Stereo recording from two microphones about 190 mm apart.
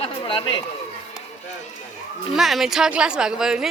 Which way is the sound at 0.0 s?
30° left (ahead or behind).